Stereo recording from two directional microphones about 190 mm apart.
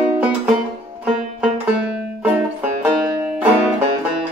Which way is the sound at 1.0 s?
5° right (ahead or behind).